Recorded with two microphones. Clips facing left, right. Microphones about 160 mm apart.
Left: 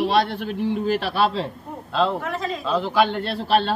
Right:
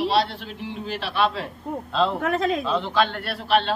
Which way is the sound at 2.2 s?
60° right (ahead or behind).